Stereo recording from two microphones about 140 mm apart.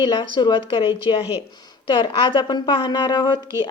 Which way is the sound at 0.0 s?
35° left (ahead or behind).